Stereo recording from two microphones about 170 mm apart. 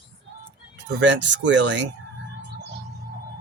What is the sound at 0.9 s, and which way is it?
Speech, 90° right.